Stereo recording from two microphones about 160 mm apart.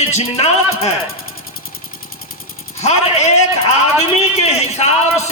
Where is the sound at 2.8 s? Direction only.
45° left (ahead or behind).